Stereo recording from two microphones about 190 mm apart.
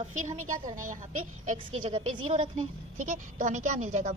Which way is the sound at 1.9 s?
25° right (ahead or behind).